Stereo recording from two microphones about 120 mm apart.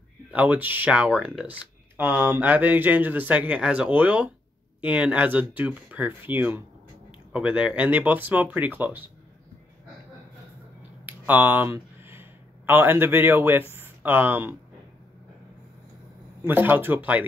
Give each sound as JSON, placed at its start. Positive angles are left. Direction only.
{"t": 0.3, "sound": "speech", "side_deg": -15}
{"t": 11.1, "sound": "speech", "side_deg": -15}
{"t": 16.4, "sound": "speech", "side_deg": -15}